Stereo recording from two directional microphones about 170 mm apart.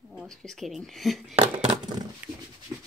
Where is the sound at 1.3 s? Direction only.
35° right (ahead or behind).